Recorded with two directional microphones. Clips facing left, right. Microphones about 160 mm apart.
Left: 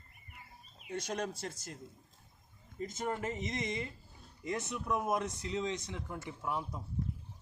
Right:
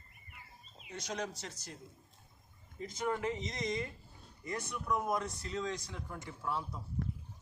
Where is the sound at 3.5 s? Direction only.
25° left (ahead or behind).